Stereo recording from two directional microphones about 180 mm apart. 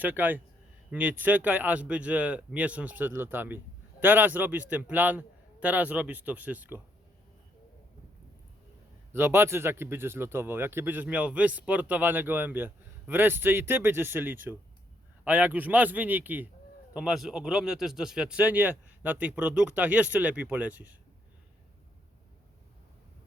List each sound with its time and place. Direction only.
0.0 s a man's voice: 10° right (ahead or behind)
9.1 s speech: 15° right (ahead or behind)